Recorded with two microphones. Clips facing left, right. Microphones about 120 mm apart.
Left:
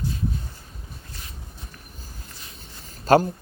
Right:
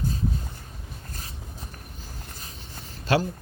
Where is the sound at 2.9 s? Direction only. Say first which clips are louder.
Left 7 dB; 45° left (ahead or behind).